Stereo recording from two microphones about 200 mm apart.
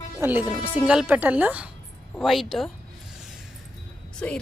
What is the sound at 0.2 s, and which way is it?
A woman's voice, 10° right (ahead or behind).